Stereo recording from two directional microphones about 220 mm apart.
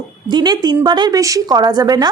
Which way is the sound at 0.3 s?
20° right (ahead or behind).